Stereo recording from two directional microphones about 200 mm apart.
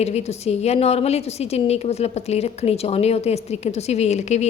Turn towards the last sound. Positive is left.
turn(degrees=35)  # may be behind; listen again after turning